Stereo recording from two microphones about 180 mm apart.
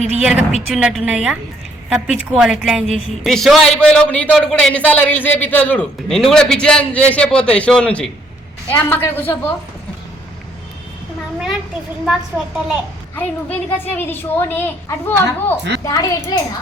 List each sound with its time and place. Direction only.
0.0 s a woman's voice: 5° right (ahead or behind)
13.1 s a woman's voice: 10° left (ahead or behind)